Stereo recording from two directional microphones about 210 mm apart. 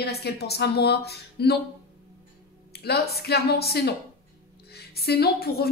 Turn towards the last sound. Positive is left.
turn(degrees=45)  # may be behind; listen again after turning